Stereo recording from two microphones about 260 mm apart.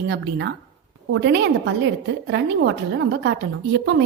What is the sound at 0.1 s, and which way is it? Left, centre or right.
A woman's voice, right.